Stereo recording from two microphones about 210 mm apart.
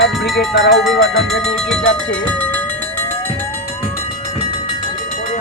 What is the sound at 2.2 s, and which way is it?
Speech, 5° left (ahead or behind).